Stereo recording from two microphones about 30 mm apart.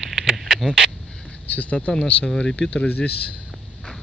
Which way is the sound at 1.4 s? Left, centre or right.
Left.